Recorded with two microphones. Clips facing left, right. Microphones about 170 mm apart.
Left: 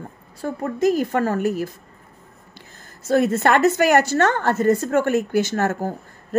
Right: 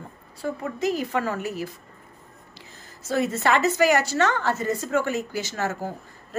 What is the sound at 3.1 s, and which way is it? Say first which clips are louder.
A woman's voice: left 5 dB; 55° left (ahead or behind).